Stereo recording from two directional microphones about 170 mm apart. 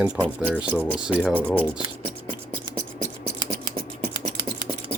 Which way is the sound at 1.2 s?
5° left (ahead or behind).